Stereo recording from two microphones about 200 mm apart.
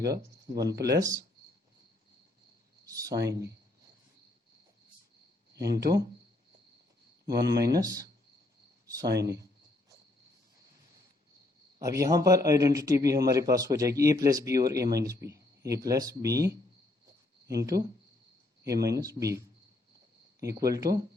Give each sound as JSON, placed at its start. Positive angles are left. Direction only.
{"t": 0.0, "sound": "a man's voice", "side_deg": -15}
{"t": 2.8, "sound": "a man's voice", "side_deg": -15}
{"t": 5.7, "sound": "a man's voice", "side_deg": -20}
{"t": 7.3, "sound": "speech", "side_deg": -55}
{"t": 7.7, "sound": "a man's voice", "side_deg": -15}
{"t": 9.2, "sound": "a man's voice", "side_deg": -15}
{"t": 11.8, "sound": "a man's voice", "side_deg": -15}